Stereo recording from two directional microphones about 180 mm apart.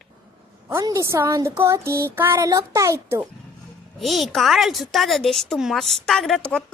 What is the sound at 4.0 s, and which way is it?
A woman's voice, centre (ahead or behind).